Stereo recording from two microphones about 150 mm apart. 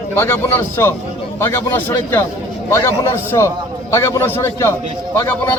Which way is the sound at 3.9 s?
15° left (ahead or behind).